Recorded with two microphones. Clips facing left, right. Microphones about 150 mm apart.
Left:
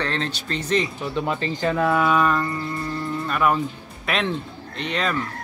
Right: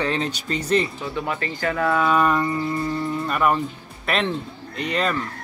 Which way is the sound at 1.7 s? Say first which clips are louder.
Even; 10° left (ahead or behind).